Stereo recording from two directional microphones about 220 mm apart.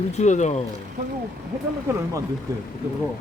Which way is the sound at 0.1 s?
30° left (ahead or behind).